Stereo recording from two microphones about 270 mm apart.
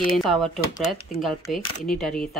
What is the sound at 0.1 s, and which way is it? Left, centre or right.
Speech, centre.